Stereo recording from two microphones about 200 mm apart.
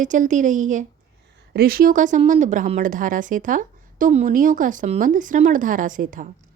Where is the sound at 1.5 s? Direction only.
50° right (ahead or behind).